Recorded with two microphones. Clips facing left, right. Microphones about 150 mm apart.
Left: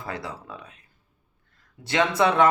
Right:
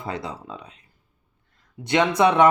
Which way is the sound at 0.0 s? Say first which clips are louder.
Right 3 dB; 20° right (ahead or behind).